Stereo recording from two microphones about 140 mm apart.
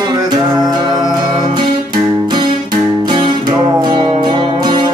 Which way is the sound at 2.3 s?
35° right (ahead or behind).